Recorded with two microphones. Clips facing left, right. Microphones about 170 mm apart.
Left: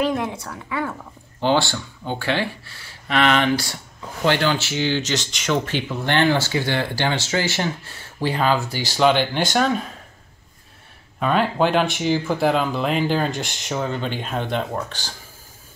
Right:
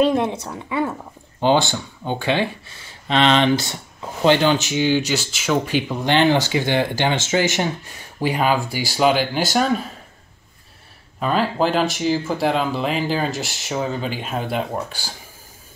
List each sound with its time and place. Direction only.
0.0 s a woman's voice: 20° right (ahead or behind); by 9.8 s 5° right (ahead or behind)
11.1 s speech: centre (ahead or behind)